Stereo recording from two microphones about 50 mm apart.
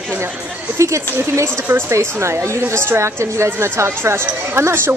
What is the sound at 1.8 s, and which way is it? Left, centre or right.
Speech, right.